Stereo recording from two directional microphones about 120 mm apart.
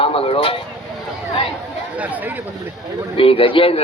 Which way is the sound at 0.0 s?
50° left (ahead or behind).